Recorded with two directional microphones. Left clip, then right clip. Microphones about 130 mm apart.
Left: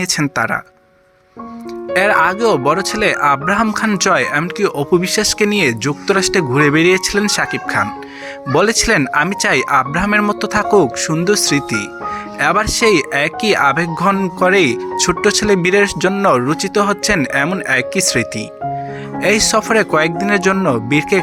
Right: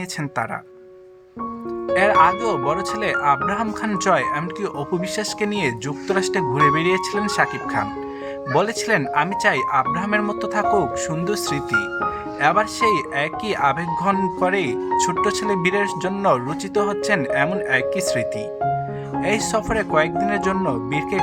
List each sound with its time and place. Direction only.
0.0 s speech: 25° left (ahead or behind)
1.9 s speech: 30° left (ahead or behind)